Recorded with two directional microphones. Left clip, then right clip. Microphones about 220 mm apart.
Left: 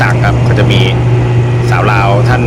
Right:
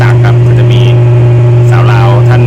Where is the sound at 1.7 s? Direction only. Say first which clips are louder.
Left 2 dB; 15° left (ahead or behind).